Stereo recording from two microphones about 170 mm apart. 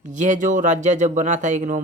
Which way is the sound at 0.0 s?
45° right (ahead or behind).